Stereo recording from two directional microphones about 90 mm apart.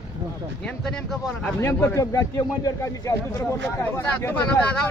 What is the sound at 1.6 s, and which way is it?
Speech, 25° left (ahead or behind).